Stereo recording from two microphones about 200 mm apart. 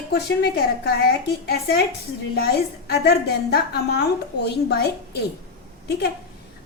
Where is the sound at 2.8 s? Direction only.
50° left (ahead or behind).